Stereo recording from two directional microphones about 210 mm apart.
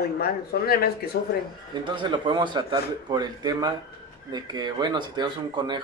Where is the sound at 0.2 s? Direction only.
45° left (ahead or behind).